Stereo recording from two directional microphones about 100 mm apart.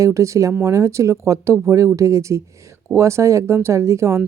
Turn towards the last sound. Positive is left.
turn(degrees=-30)  # may be behind; listen again after turning